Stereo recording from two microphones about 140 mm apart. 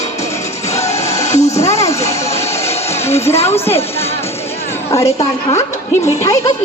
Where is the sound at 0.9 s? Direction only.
20° left (ahead or behind).